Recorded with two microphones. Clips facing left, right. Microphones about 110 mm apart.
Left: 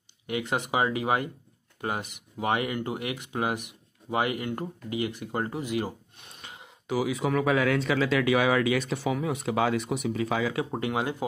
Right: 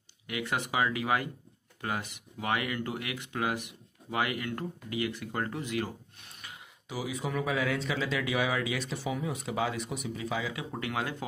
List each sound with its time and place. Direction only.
0.3 s speech: 25° left (ahead or behind)
6.9 s speech: 80° left
10.7 s speech: 25° left (ahead or behind)